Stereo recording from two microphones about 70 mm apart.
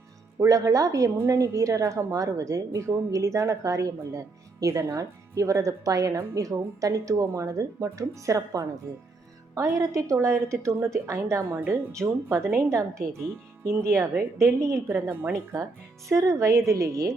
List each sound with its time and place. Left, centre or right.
0.3 s speech: right
9.6 s a woman's voice: right
9.9 s speech: right
11.4 s a woman's voice: right
11.7 s speech: right
13.8 s a woman's voice: right
16.0 s speech: right